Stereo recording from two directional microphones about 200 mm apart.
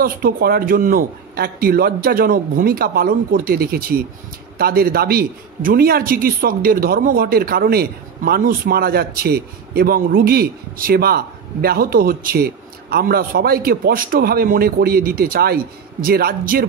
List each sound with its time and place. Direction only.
0.0 s a man's voice: 50° right (ahead or behind)